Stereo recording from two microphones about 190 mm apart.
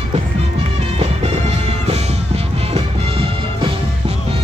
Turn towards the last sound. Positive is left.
turn(degrees=-30)  # may be behind; listen again after turning